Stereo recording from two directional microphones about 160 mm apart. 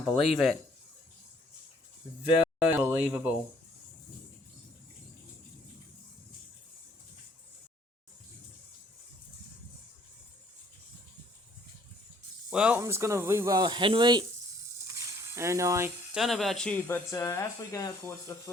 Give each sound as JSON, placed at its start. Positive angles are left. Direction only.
{"t": 0.2, "sound": "speech", "side_deg": 0}
{"t": 2.6, "sound": "speech", "side_deg": -10}
{"t": 12.5, "sound": "speech", "side_deg": -5}
{"t": 12.8, "sound": "speech", "side_deg": -20}
{"t": 15.4, "sound": "speech", "side_deg": -20}
{"t": 16.1, "sound": "speech", "side_deg": 0}